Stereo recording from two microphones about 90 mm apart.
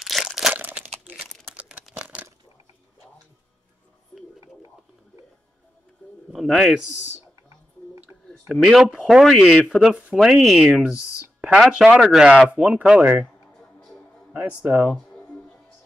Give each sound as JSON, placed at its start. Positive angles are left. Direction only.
{"t": 0.0, "sound": "crumpling", "side_deg": 0}
{"t": 0.6, "sound": "crumpling", "side_deg": -20}
{"t": 2.0, "sound": "a sound", "side_deg": -15}
{"t": 6.3, "sound": "speech", "side_deg": 0}
{"t": 8.3, "sound": "speech", "side_deg": 0}
{"t": 14.3, "sound": "speech", "side_deg": -15}
{"t": 14.9, "sound": "music", "side_deg": 10}